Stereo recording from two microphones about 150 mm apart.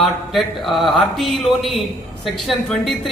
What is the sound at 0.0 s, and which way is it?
Speech, centre (ahead or behind).